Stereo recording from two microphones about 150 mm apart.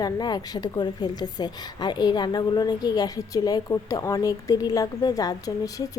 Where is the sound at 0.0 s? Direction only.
25° left (ahead or behind).